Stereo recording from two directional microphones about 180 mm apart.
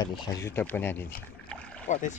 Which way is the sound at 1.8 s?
45° left (ahead or behind).